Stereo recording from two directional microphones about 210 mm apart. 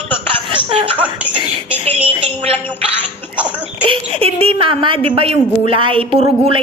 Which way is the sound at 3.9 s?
25° right (ahead or behind).